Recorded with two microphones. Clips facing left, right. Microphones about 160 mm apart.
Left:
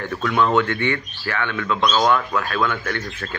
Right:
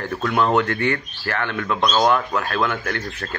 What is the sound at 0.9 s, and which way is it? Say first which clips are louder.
Speech: even; 45° right (ahead or behind).